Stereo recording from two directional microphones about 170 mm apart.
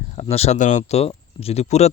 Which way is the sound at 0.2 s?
40° left (ahead or behind).